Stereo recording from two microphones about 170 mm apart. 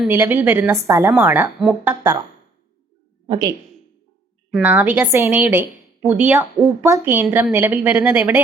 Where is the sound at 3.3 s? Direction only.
25° right (ahead or behind).